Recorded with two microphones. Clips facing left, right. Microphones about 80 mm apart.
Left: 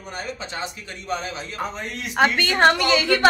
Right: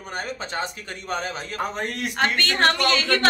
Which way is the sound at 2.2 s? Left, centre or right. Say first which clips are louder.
Left 4 dB; centre.